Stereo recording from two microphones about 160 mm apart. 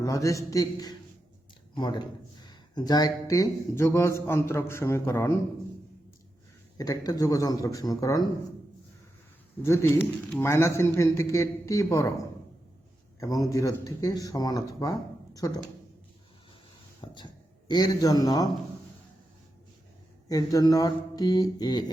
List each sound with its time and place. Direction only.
0.0 s speech: 20° left (ahead or behind)
6.7 s speech: 25° left (ahead or behind)
9.6 s speech: 15° left (ahead or behind)
13.1 s speech: 20° left (ahead or behind)
17.0 s speech: 30° left (ahead or behind)
20.2 s speech: 20° left (ahead or behind)